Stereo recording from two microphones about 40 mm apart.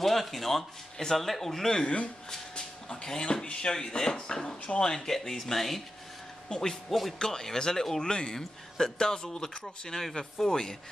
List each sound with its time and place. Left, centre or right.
0.0 s speech: centre
3.1 s speech: centre